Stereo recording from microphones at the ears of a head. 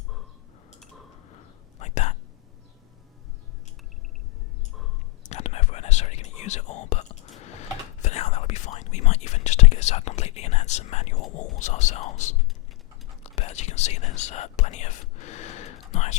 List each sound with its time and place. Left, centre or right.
1.3 s whispering: left
5.2 s whispering: left
13.2 s speech: left